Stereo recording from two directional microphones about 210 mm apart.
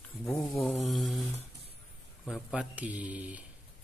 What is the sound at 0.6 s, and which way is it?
Mantra, centre (ahead or behind).